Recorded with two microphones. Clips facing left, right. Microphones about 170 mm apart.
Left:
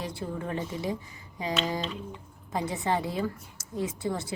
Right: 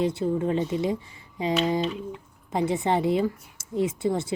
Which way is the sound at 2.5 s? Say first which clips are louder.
Right 5 dB; 25° right (ahead or behind).